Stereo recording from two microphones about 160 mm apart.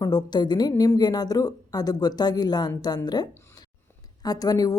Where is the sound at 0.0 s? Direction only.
25° left (ahead or behind).